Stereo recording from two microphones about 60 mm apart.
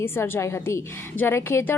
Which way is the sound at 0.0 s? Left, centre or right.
Left.